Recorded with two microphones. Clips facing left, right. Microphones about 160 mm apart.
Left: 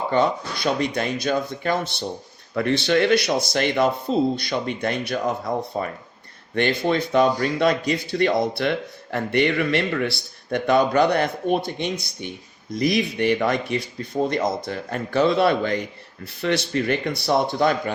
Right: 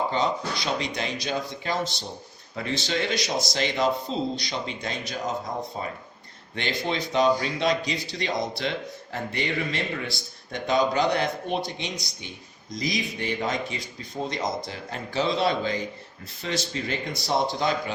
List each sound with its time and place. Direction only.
0.1 s speech: 55° left (ahead or behind)
6.5 s speech: 55° left (ahead or behind)